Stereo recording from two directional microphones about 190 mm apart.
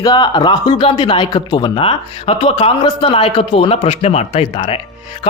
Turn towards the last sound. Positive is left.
turn(degrees=25)  # may be behind; listen again after turning